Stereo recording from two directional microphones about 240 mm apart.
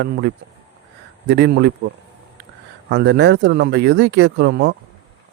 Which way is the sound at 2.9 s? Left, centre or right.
Right.